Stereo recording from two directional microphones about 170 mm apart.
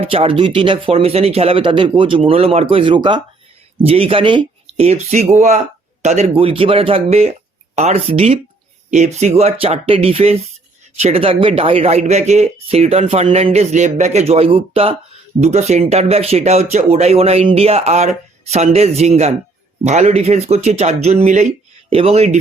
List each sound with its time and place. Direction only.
0.0 s speech: 35° right (ahead or behind)